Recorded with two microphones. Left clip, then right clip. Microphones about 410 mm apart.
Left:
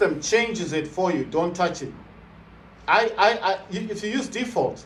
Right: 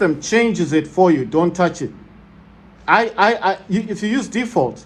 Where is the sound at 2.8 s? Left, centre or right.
Right.